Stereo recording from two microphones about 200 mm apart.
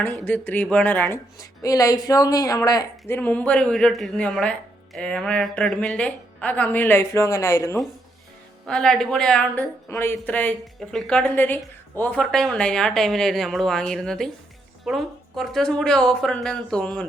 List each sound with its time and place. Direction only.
0.3 s speech: 10° left (ahead or behind)
8.6 s speech: 5° left (ahead or behind)